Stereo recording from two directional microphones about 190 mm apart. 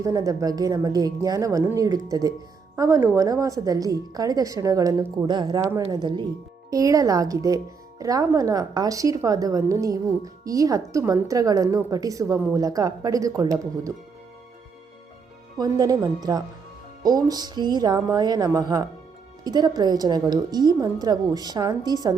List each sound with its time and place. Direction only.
0.0 s a woman's voice: 15° right (ahead or behind)
15.5 s speech: 20° right (ahead or behind)